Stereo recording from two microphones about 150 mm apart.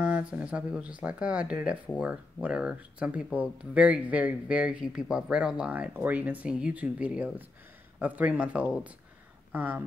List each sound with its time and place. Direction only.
0.0 s speech: 5° right (ahead or behind)